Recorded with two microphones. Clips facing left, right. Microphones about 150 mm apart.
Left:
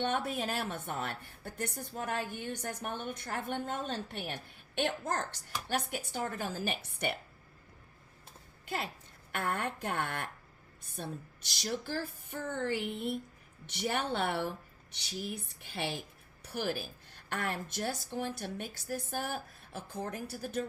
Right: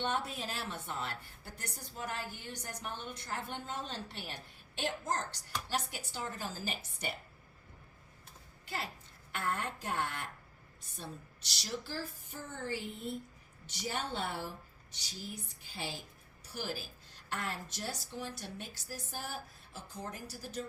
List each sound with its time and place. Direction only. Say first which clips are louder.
0.0 s a woman's voice: left 4 dB; 55° left (ahead or behind)
9.3 s a woman's voice: left 2 dB; 55° left (ahead or behind)